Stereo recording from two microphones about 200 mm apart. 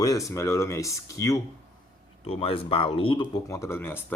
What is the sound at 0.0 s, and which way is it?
Speech, 15° left (ahead or behind).